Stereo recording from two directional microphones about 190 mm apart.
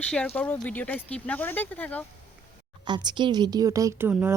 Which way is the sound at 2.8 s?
25° right (ahead or behind).